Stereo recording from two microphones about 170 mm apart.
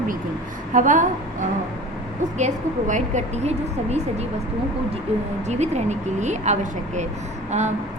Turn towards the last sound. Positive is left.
turn(degrees=-40)  # may be behind; listen again after turning